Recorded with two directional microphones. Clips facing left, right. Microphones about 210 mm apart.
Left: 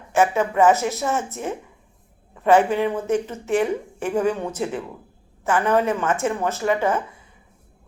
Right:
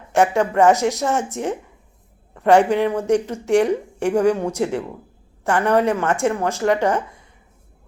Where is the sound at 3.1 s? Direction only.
15° right (ahead or behind).